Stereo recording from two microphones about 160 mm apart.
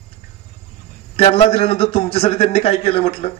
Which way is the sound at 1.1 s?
40° left (ahead or behind).